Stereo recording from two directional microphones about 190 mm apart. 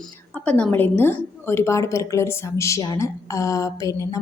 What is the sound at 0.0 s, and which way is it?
A woman's voice, 5° left (ahead or behind).